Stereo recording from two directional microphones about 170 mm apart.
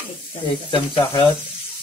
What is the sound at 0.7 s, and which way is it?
Speech, 30° left (ahead or behind).